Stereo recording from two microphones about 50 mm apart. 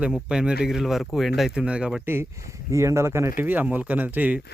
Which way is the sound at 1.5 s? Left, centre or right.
Centre.